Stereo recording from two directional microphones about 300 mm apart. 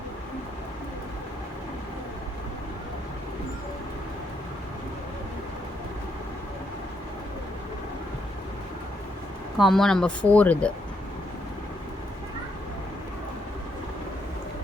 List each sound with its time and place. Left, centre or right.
9.6 s speech: centre